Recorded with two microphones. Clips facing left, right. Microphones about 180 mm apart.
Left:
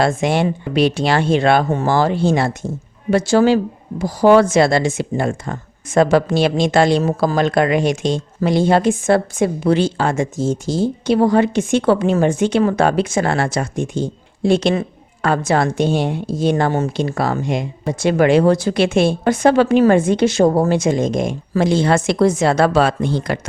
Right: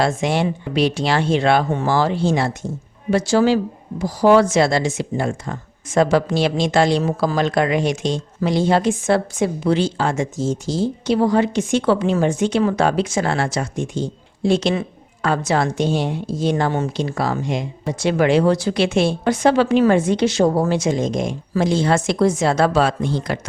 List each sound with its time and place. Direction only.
0.0 s speech: 55° left (ahead or behind)